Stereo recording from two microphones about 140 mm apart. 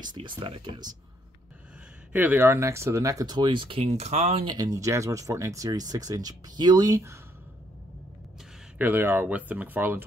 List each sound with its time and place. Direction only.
0.0 s speech: 35° right (ahead or behind)
2.1 s speech: 15° right (ahead or behind); by 4.5 s 50° right (ahead or behind)
4.5 s speech: 25° right (ahead or behind)
8.7 s speech: 15° right (ahead or behind)